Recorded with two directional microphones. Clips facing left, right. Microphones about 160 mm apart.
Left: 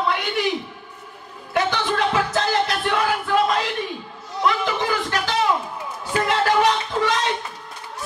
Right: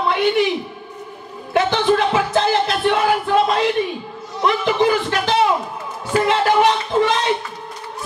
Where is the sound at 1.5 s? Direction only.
25° right (ahead or behind).